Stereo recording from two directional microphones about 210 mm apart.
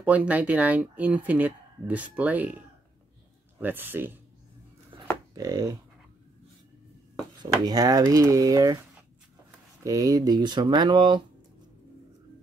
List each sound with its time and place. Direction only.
0.0 s speech: 5° right (ahead or behind)
3.5 s speech: 10° right (ahead or behind)
4.9 s a sound: 25° right (ahead or behind)
5.3 s speech: 15° right (ahead or behind)
7.4 s speech: 15° right (ahead or behind)
9.8 s speech: 15° right (ahead or behind)